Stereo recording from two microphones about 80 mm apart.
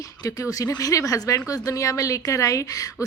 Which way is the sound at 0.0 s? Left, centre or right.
Left.